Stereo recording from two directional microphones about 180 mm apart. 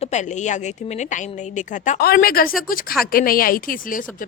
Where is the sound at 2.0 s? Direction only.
55° left (ahead or behind).